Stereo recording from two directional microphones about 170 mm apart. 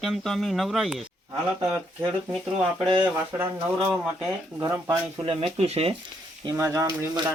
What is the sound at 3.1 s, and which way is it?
Speech, 10° right (ahead or behind).